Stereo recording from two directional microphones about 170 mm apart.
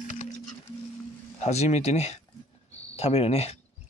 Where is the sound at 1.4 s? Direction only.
40° left (ahead or behind).